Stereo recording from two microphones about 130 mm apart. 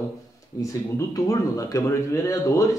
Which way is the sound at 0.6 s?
25° left (ahead or behind).